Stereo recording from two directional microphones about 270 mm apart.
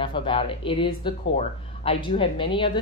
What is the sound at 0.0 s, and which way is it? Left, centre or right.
A woman's voice, centre.